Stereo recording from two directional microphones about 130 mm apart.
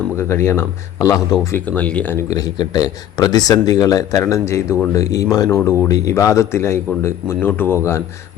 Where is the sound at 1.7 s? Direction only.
10° left (ahead or behind).